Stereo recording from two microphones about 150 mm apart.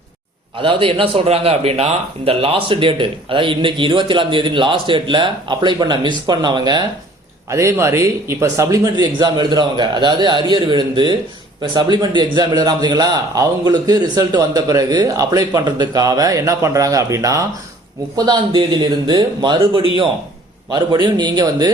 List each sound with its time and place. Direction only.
0.6 s a man's voice: 35° right (ahead or behind)
7.5 s a man's voice: 20° right (ahead or behind)